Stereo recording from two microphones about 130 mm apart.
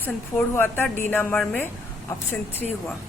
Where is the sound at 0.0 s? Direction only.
15° left (ahead or behind).